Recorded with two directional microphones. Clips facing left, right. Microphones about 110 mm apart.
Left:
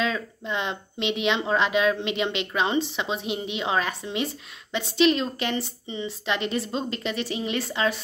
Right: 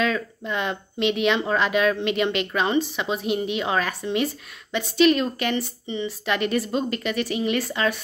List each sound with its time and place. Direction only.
0.0 s speech: 25° left (ahead or behind)